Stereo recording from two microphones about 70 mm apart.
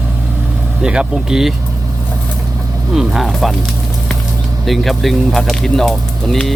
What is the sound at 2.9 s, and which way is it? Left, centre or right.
Speech, centre.